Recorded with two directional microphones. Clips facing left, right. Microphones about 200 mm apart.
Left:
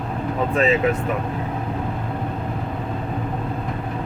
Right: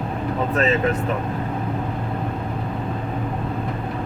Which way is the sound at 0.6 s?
10° left (ahead or behind).